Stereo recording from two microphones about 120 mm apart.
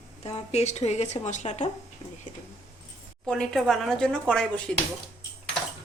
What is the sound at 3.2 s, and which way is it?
Speech, 5° left (ahead or behind).